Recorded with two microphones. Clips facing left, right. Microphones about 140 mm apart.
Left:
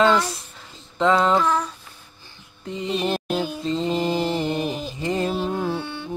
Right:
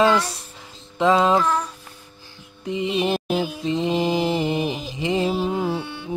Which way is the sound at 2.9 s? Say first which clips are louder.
Even; 5° right (ahead or behind).